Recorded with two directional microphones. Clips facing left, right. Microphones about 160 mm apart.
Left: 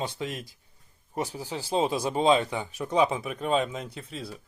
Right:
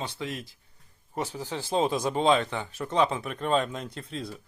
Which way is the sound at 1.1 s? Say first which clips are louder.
Even; 10° left (ahead or behind).